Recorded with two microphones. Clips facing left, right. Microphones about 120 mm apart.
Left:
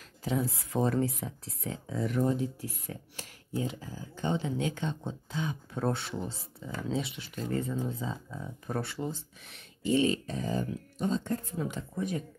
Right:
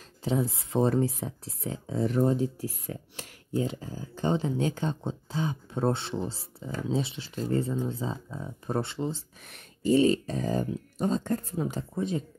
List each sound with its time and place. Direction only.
0.2 s speech: 25° right (ahead or behind)
9.4 s speech: 50° right (ahead or behind); by 12.3 s 25° right (ahead or behind)